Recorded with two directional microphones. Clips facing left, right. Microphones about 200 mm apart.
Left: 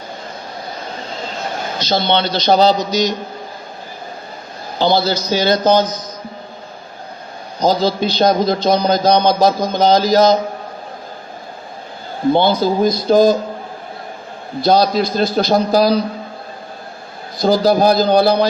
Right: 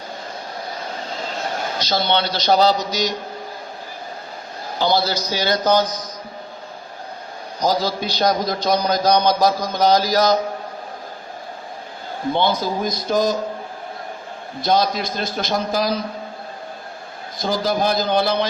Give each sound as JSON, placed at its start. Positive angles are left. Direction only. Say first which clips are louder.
{"t": 1.8, "sound": "a man's voice", "louder": "left 4 dB", "side_deg": 25}
{"t": 4.8, "sound": "a man's voice", "louder": "left 4 dB", "side_deg": 25}
{"t": 7.6, "sound": "a man's voice", "louder": "left 5 dB", "side_deg": 25}
{"t": 12.3, "sound": "a man's voice", "louder": "left 6 dB", "side_deg": 30}
{"t": 14.6, "sound": "a man's voice", "louder": "left 6 dB", "side_deg": 35}
{"t": 17.3, "sound": "a man's voice", "louder": "left 8 dB", "side_deg": 35}